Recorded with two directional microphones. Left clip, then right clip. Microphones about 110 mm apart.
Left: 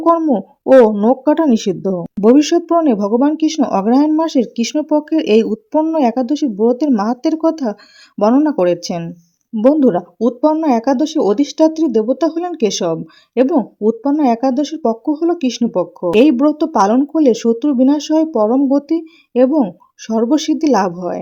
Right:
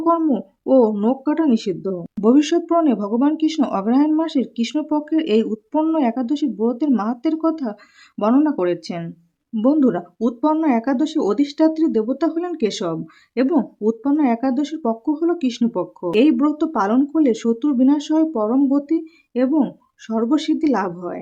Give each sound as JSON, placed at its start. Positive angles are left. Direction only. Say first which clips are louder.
{"t": 0.0, "sound": "speech", "louder": "left 5 dB", "side_deg": 35}
{"t": 1.2, "sound": "speech", "louder": "left 6 dB", "side_deg": 50}
{"t": 2.2, "sound": "speech", "louder": "left 5 dB", "side_deg": 35}
{"t": 9.6, "sound": "speech", "louder": "left 6 dB", "side_deg": 30}
{"t": 19.5, "sound": "speech", "louder": "left 4 dB", "side_deg": 35}